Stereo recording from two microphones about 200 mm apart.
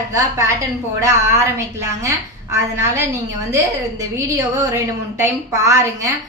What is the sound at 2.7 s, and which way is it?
Speech, 15° right (ahead or behind).